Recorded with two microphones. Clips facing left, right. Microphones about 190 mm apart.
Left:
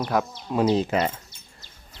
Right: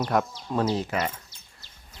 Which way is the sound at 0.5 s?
15° left (ahead or behind).